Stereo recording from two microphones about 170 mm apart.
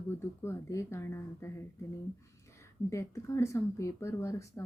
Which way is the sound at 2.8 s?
15° left (ahead or behind).